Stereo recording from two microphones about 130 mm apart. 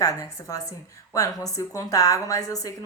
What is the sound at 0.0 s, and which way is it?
A woman's voice, 25° left (ahead or behind).